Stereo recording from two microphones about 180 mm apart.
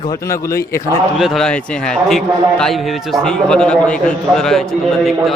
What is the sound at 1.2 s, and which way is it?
A man's voice, centre (ahead or behind).